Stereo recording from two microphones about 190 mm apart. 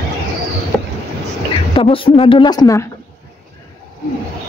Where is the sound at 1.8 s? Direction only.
30° left (ahead or behind).